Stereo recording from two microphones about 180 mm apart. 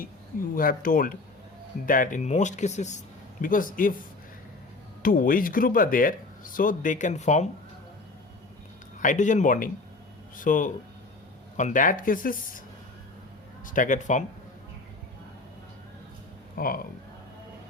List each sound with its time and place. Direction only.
0.5 s speech: 50° left (ahead or behind)
5.0 s speech: 50° left (ahead or behind)
9.0 s speech: 45° left (ahead or behind)
13.7 s speech: 45° left (ahead or behind)
16.6 s speech: 55° left (ahead or behind)